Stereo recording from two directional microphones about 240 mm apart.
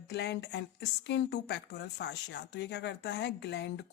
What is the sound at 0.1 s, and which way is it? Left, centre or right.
Speech, left.